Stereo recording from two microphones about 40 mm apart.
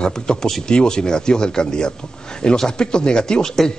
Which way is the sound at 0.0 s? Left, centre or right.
Centre.